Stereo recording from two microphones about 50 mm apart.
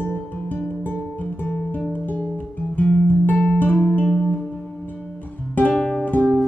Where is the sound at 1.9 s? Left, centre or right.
Left.